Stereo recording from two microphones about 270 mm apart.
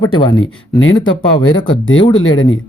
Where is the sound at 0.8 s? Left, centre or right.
Left.